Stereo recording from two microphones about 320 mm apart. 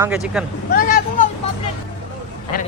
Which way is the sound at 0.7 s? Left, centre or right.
Left.